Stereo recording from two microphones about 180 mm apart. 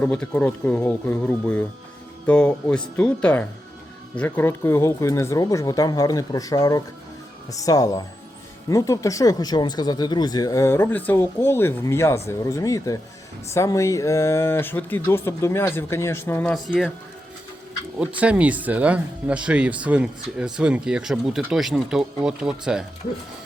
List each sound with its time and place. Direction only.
0.0 s speech: 5° left (ahead or behind)
18.2 s speech: 5° right (ahead or behind)